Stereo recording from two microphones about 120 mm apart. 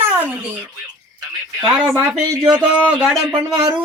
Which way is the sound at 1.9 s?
20° right (ahead or behind).